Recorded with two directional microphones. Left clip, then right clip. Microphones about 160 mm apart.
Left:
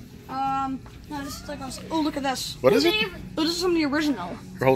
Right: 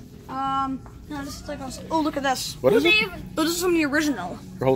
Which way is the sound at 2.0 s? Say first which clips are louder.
Right 2 dB; 35° left (ahead or behind).